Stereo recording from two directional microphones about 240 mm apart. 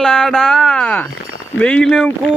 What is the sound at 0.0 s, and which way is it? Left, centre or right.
Speech, centre.